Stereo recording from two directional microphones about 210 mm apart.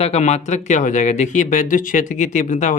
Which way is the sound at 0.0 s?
30° left (ahead or behind).